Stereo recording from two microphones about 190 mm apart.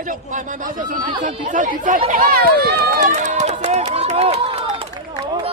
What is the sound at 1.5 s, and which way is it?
Speech, 45° right (ahead or behind).